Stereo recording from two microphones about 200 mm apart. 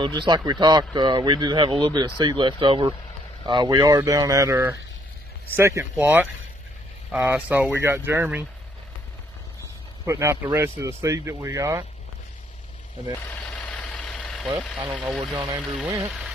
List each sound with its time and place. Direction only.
0.2 s speech: 20° right (ahead or behind)
10.1 s speech: 15° right (ahead or behind)
13.4 s vehicle: 5° left (ahead or behind)
14.9 s speech: centre (ahead or behind)
15.4 s speech: 15° right (ahead or behind)
16.0 s speech: centre (ahead or behind)